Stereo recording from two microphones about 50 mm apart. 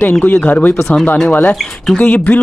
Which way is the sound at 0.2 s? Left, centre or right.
Left.